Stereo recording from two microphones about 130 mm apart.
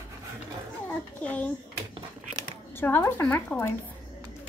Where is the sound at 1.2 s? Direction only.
10° left (ahead or behind).